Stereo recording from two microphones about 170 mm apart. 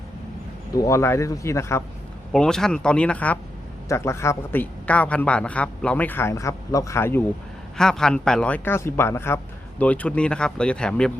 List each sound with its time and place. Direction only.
0.7 s a man's voice: 20° left (ahead or behind)
2.3 s a man's voice: 5° left (ahead or behind)